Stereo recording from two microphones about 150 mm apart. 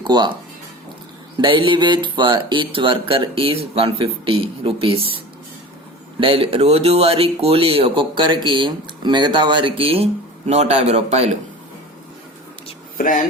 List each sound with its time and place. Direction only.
0.0 s speech: 30° right (ahead or behind)
1.4 s speech: 35° right (ahead or behind)
13.0 s speech: 60° left (ahead or behind)